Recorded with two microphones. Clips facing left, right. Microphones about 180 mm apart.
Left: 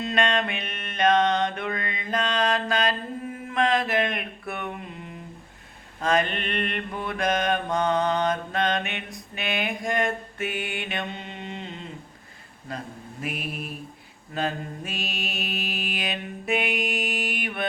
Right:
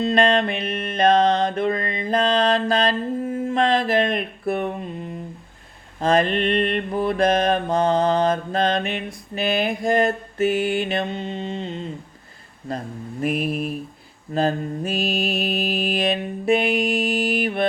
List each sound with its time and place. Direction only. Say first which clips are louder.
0.0 s mantra: right 7 dB; 35° right (ahead or behind)
6.0 s mantra: right 6 dB; 30° right (ahead or behind)
13.2 s mantra: right 10 dB; 40° right (ahead or behind)